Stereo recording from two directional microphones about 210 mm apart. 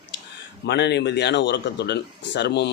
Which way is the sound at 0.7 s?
55° left (ahead or behind).